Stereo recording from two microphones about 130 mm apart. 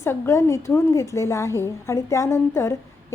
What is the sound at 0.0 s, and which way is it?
A woman's voice, 20° left (ahead or behind).